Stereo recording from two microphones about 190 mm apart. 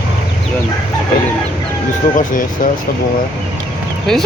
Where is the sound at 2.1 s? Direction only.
45° left (ahead or behind).